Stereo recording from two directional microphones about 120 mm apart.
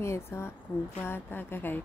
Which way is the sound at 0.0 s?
20° left (ahead or behind).